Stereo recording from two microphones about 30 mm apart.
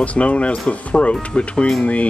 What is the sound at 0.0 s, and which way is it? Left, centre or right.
Speech, left.